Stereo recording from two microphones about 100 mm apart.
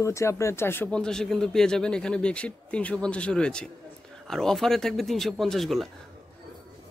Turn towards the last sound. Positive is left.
turn(degrees=0)  # may be behind; listen again after turning